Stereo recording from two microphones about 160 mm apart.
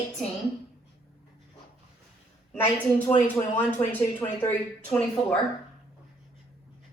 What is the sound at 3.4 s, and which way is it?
A woman's voice, 20° left (ahead or behind).